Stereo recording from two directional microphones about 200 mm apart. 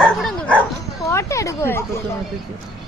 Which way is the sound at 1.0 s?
15° left (ahead or behind).